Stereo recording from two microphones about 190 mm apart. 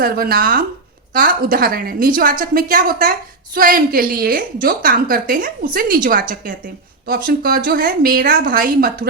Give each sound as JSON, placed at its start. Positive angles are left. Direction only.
{"t": 0.0, "sound": "a woman's voice", "side_deg": -50}